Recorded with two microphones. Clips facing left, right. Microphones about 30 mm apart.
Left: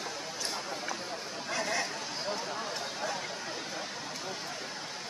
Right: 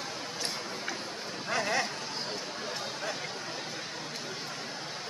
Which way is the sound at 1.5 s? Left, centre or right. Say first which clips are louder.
Right 3 dB; right.